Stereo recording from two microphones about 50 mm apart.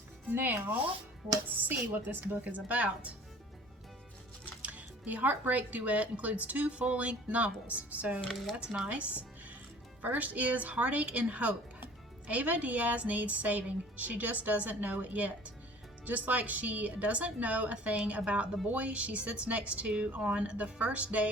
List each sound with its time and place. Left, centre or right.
0.3 s speech: right
4.6 s speech: right
8.9 s music: right
10.0 s speech: right